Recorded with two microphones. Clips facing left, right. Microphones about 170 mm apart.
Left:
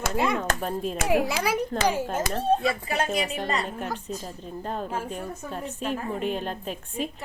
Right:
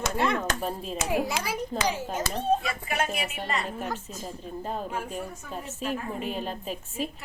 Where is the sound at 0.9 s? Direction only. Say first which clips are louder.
Left 3 dB; 75° left (ahead or behind).